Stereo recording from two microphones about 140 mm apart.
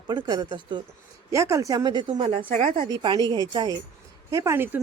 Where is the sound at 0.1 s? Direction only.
30° right (ahead or behind).